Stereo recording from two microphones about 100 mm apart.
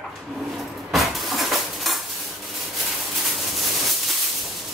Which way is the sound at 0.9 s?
Centre (ahead or behind).